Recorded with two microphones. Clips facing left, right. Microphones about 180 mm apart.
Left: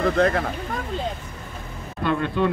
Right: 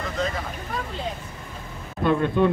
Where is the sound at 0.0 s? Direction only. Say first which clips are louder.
Left 8 dB; 60° left (ahead or behind).